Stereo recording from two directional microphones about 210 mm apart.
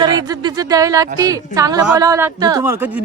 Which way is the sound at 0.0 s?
20° right (ahead or behind).